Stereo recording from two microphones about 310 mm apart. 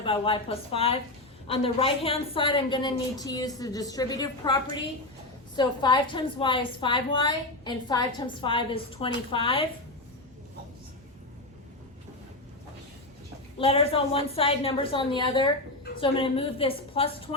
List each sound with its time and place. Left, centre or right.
0.0 s a woman's voice: centre
13.6 s a woman's voice: centre